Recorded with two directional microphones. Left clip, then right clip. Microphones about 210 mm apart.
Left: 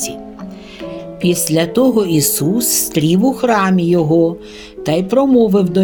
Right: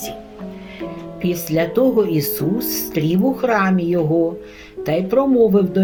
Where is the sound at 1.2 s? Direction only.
55° left (ahead or behind).